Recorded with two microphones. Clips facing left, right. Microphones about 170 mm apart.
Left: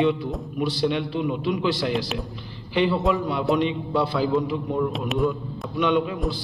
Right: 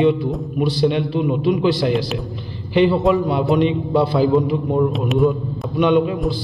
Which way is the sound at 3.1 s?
20° right (ahead or behind).